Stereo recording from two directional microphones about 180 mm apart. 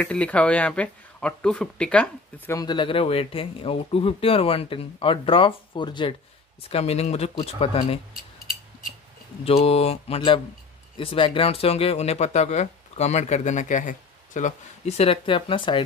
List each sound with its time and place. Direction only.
0.0 s speech: 5° left (ahead or behind)
2.6 s speech: 25° left (ahead or behind)
9.4 s speech: 35° left (ahead or behind)